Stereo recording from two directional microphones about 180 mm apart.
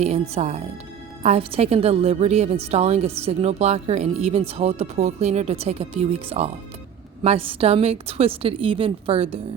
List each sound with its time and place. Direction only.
0.0 s a woman's voice: 35° right (ahead or behind)